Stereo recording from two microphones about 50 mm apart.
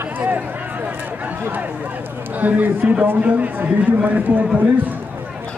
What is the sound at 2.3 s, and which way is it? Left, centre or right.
A man's voice, right.